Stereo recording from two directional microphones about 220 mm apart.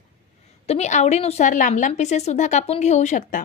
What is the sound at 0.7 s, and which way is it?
A woman's voice, 30° left (ahead or behind).